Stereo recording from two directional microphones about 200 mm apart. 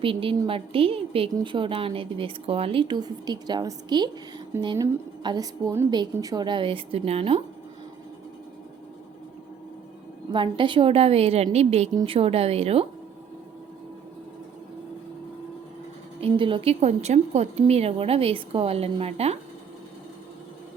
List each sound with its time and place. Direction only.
0.0 s a woman's voice: 25° right (ahead or behind)
10.3 s a woman's voice: 25° right (ahead or behind)
16.2 s a woman's voice: 25° right (ahead or behind)